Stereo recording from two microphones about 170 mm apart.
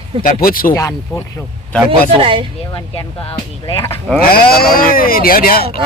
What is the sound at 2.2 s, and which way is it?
Speech, 30° right (ahead or behind).